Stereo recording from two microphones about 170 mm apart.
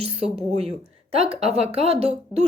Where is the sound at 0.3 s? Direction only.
35° right (ahead or behind).